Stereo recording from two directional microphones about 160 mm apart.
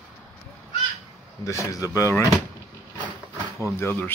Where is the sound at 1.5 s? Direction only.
20° left (ahead or behind).